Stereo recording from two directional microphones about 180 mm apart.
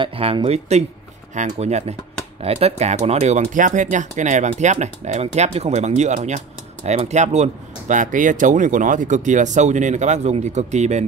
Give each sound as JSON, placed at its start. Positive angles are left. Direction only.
{"t": 0.0, "sound": "speech", "side_deg": -30}